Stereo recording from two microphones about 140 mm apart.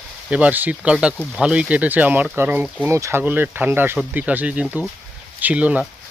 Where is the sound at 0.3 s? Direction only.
10° right (ahead or behind).